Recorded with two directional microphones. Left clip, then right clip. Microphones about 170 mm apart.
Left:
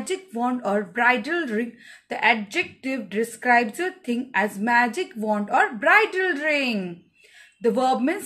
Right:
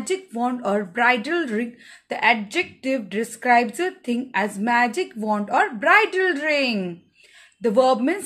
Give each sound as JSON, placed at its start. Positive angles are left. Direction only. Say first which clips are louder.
{"t": 0.0, "sound": "speech", "louder": "right 2 dB", "side_deg": -20}